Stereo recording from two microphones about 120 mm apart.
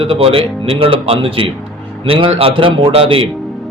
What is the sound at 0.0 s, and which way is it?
Speech, 50° right (ahead or behind).